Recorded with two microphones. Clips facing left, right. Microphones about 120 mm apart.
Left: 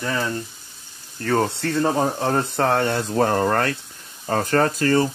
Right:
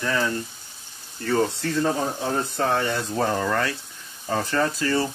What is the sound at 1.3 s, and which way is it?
Speech, 65° left (ahead or behind).